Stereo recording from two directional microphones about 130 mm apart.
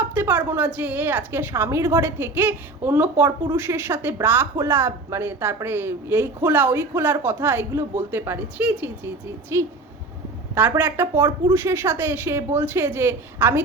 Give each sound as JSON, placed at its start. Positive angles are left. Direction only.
{"t": 0.0, "sound": "a woman's voice", "side_deg": -15}
{"t": 10.8, "sound": "a woman's voice", "side_deg": -15}